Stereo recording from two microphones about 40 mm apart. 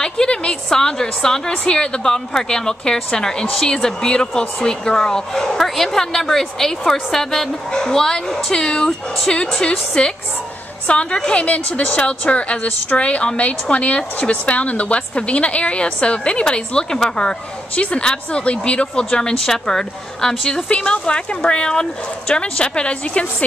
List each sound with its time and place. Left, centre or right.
0.0 s a woman's voice: left
11.4 s a woman's voice: left